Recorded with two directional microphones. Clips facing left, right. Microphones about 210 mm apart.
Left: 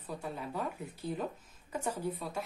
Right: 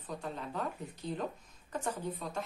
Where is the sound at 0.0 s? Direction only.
10° left (ahead or behind).